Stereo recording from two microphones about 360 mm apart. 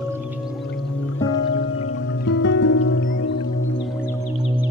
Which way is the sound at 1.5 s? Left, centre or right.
Left.